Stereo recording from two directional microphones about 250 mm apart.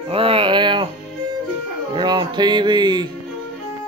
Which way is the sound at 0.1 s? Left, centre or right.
Right.